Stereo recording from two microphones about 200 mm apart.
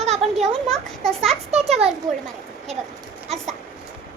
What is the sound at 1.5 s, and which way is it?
Speech, 30° right (ahead or behind).